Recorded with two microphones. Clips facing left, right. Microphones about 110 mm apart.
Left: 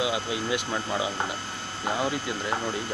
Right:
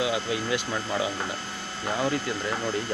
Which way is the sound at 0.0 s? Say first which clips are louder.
Right 1 dB; 15° left (ahead or behind).